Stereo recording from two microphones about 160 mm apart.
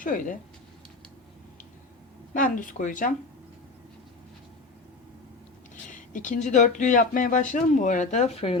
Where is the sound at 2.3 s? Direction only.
55° left (ahead or behind).